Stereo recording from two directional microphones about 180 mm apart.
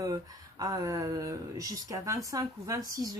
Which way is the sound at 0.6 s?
20° right (ahead or behind).